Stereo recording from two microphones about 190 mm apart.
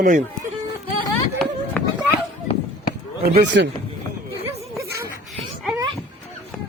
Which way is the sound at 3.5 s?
60° right (ahead or behind).